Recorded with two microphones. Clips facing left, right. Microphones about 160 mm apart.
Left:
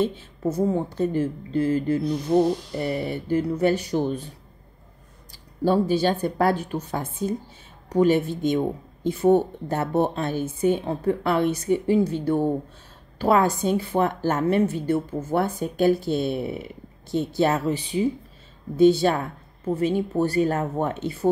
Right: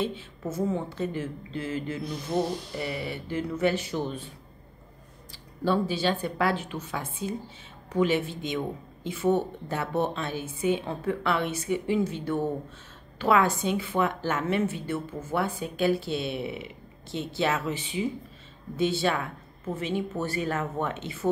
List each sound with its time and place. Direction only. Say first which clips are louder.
0.0 s a woman's voice: left 7 dB; 35° left (ahead or behind)
5.3 s a woman's voice: left 5 dB; 45° left (ahead or behind)